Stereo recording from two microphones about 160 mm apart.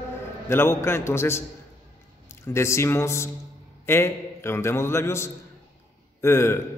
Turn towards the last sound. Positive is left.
turn(degrees=15)  # may be behind; listen again after turning